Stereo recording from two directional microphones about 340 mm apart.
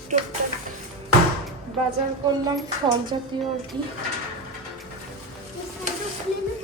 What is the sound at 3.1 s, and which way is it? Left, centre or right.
Speech, centre.